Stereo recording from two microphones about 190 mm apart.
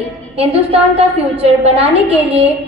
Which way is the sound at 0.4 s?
30° right (ahead or behind).